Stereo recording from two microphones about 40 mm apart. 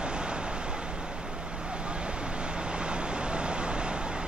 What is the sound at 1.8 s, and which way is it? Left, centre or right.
Waves, right.